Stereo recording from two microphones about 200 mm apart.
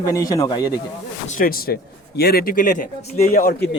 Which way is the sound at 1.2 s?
45° left (ahead or behind).